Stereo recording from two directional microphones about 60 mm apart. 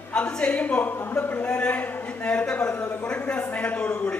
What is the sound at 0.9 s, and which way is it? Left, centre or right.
Speech, left.